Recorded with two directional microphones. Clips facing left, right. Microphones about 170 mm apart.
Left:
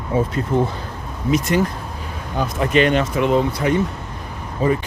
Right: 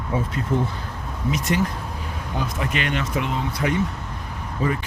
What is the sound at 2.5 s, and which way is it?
Speech, 35° left (ahead or behind).